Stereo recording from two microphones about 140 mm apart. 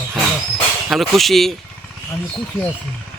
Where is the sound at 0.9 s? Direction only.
Centre (ahead or behind).